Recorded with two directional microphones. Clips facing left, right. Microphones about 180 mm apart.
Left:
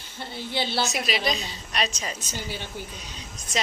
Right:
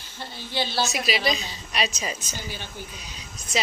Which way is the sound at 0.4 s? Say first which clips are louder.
Even; 60° left (ahead or behind).